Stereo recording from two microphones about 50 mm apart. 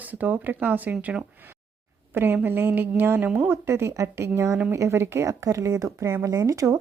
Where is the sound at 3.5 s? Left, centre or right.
Right.